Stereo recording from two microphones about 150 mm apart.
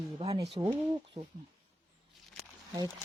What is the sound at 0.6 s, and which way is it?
Speech, 15° right (ahead or behind).